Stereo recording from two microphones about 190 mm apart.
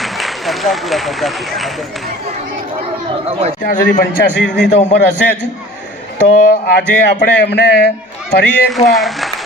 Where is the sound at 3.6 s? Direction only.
50° left (ahead or behind).